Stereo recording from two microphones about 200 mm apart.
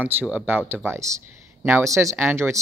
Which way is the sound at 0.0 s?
10° right (ahead or behind).